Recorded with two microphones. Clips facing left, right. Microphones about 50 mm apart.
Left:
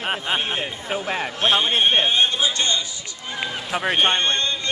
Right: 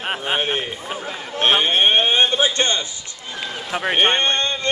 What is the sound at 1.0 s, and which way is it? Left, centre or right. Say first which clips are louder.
Speech: left 5 dB; left.